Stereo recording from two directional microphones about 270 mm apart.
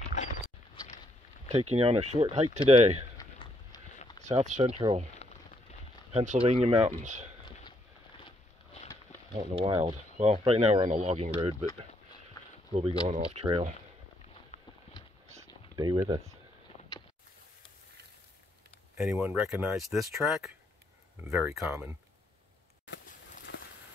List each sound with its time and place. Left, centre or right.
1.5 s speech: right
3.2 s a sound: centre
4.4 s speech: right
5.1 s a sound: left
6.1 s speech: right
9.3 s speech: centre
13.1 s speech: right
15.4 s a sound: centre
18.9 s speech: centre